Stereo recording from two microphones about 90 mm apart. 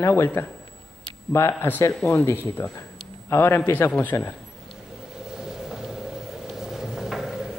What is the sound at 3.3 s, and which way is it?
Speech, 25° left (ahead or behind).